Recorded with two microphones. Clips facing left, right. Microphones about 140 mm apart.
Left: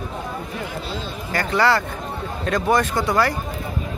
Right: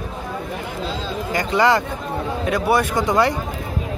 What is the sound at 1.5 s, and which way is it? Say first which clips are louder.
Speech: right 2 dB; 20° right (ahead or behind).